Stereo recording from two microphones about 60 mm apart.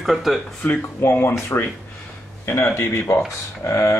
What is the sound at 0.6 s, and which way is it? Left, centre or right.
Speech, left.